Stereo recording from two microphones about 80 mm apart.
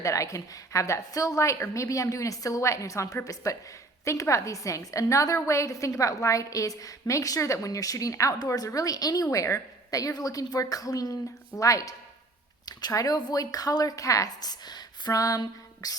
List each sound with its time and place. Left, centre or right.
0.0 s a woman's voice: left